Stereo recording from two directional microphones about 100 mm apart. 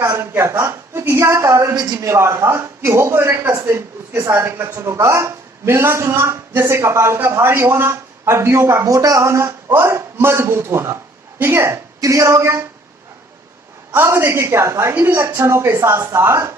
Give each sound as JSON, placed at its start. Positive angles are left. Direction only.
{"t": 0.0, "sound": "a man's voice", "side_deg": -20}
{"t": 13.9, "sound": "a man's voice", "side_deg": -25}